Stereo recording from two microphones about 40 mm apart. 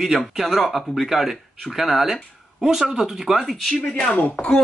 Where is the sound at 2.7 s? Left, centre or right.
Centre.